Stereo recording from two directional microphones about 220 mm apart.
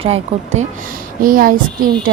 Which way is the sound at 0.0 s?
25° right (ahead or behind).